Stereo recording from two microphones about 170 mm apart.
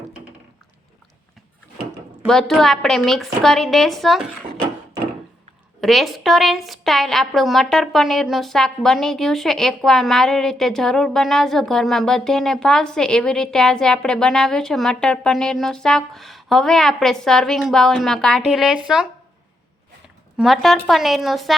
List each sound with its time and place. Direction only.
2.2 s a woman's voice: centre (ahead or behind)
5.8 s a woman's voice: centre (ahead or behind)
20.3 s a woman's voice: centre (ahead or behind)